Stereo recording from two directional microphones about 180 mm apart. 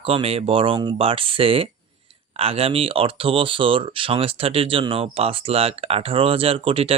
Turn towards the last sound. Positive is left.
turn(degrees=-30)  # may be behind; listen again after turning